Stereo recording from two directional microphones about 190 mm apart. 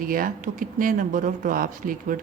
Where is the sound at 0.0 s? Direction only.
50° right (ahead or behind).